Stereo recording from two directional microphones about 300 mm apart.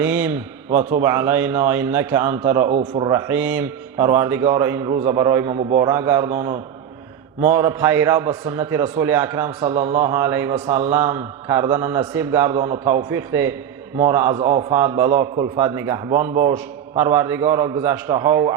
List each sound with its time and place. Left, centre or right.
0.0 s a man's voice: centre
2.7 s speech: right
3.1 s a man's voice: centre